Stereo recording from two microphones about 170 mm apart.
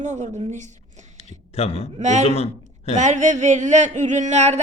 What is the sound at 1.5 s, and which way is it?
Speech, 35° left (ahead or behind).